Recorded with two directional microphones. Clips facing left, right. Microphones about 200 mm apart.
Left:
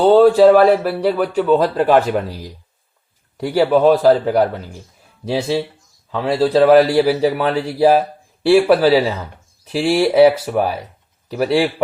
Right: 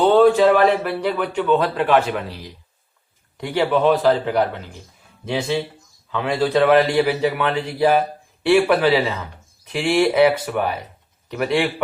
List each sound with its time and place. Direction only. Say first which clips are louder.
0.0 s a man's voice: left 4 dB; 35° left (ahead or behind)